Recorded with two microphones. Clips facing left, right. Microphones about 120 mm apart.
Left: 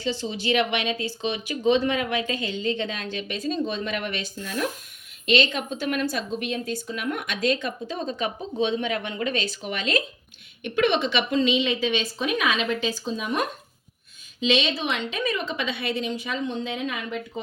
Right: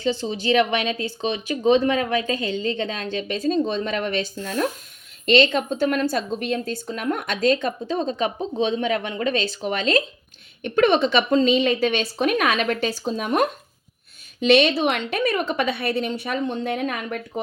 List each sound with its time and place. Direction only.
0.2 s speech: 35° right (ahead or behind); by 6.9 s 55° right (ahead or behind)
6.9 s speech: 40° right (ahead or behind)
10.6 s speech: 45° right (ahead or behind)
14.4 s a woman's voice: 65° right (ahead or behind)
16.4 s speech: 50° right (ahead or behind)